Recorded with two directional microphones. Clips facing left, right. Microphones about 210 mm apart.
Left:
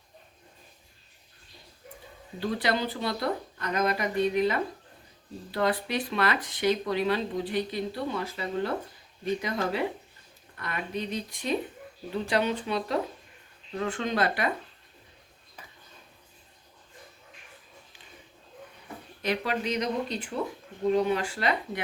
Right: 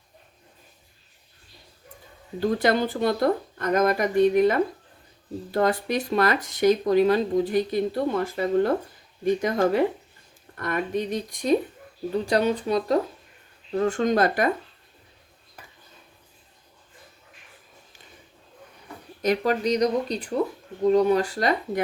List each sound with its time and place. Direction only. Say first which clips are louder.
2.4 s speech: right 6 dB; 45° right (ahead or behind)
19.2 s speech: right 7 dB; 40° right (ahead or behind)